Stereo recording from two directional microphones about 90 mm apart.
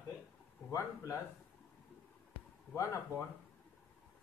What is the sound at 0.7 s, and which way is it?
Speech, 35° left (ahead or behind).